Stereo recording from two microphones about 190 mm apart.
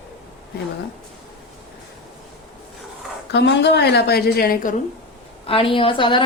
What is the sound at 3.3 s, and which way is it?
A woman's voice, 65° left (ahead or behind).